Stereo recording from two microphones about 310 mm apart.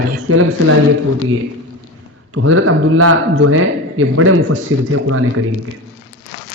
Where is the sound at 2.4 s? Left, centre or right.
Right.